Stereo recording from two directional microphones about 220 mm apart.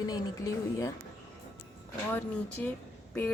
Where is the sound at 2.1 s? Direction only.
5° left (ahead or behind).